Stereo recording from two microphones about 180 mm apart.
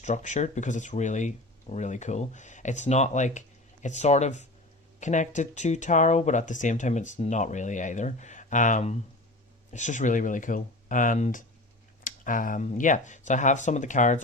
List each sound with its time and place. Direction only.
0.0 s speech: 40° left (ahead or behind)